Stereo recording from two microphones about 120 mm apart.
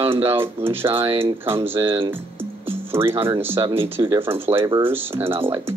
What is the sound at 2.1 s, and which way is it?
Music, 20° right (ahead or behind).